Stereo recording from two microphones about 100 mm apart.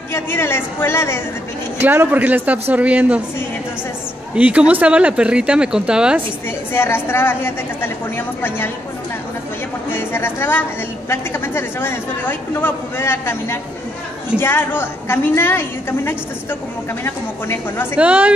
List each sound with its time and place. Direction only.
0.1 s speech: 25° left (ahead or behind)
1.8 s speech: 20° right (ahead or behind)
4.4 s speech: 15° right (ahead or behind)
6.7 s speech: 25° left (ahead or behind)
9.8 s speech: 25° left (ahead or behind)
17.9 s speech: 15° right (ahead or behind)